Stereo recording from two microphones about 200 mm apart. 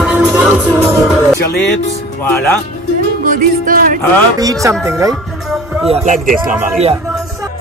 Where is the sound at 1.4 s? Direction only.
55° left (ahead or behind).